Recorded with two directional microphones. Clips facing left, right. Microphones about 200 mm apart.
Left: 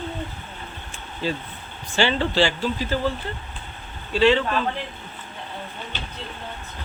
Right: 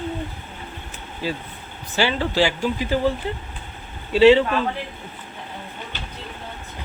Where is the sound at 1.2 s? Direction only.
10° right (ahead or behind).